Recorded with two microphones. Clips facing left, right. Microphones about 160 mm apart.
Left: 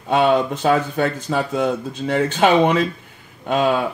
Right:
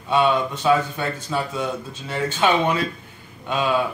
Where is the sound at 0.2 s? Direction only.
50° left (ahead or behind).